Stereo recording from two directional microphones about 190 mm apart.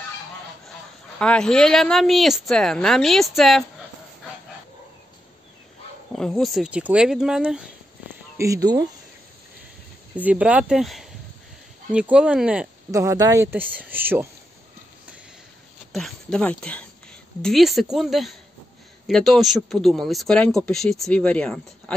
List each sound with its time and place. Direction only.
1.2 s speech: 5° left (ahead or behind)
6.1 s speech: centre (ahead or behind)
8.4 s speech: 20° right (ahead or behind)
10.1 s speech: 5° right (ahead or behind)
12.9 s speech: 15° right (ahead or behind)
15.9 s speech: 5° left (ahead or behind)